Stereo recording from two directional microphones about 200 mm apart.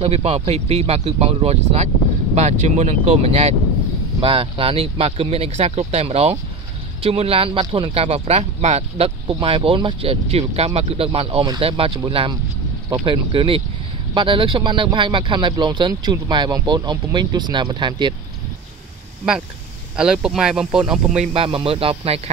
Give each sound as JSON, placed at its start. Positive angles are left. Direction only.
{"t": 0.0, "sound": "speech", "side_deg": -30}
{"t": 20.0, "sound": "speech", "side_deg": -5}
{"t": 21.3, "sound": "speech", "side_deg": -25}